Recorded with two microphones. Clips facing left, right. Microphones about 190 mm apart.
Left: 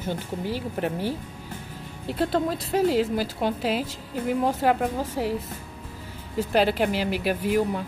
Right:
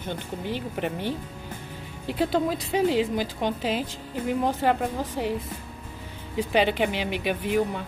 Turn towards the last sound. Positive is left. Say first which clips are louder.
# left 1 dB
turn(degrees=5)  # may be behind; listen again after turning